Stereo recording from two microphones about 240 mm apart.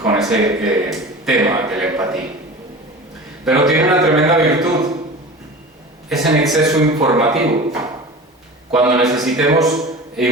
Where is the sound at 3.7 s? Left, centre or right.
Centre.